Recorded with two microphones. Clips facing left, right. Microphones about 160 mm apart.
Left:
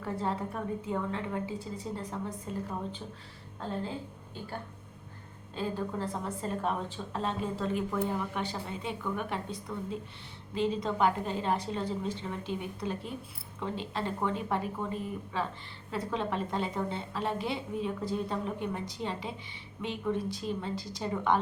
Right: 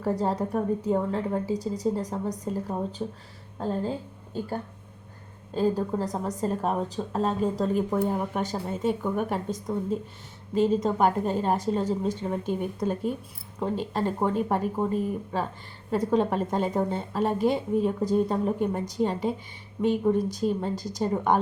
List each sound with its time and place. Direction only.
0.0 s a woman's voice: 40° right (ahead or behind)
5.5 s a woman's voice: 40° right (ahead or behind)